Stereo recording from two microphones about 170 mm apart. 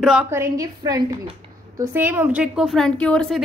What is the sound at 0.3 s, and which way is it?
A woman's voice, 20° right (ahead or behind).